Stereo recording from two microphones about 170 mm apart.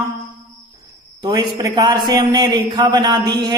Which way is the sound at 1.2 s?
20° right (ahead or behind).